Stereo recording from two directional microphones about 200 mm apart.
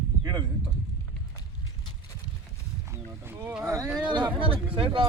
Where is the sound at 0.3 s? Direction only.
20° right (ahead or behind).